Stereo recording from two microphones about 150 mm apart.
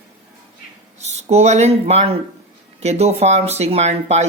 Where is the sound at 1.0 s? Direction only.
50° right (ahead or behind).